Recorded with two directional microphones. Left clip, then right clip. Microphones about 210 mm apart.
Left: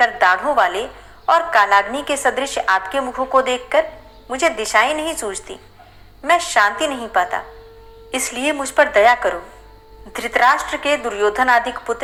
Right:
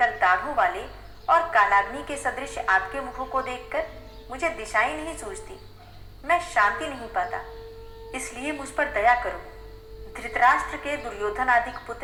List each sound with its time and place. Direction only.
0.0 s a woman's voice: 35° left (ahead or behind)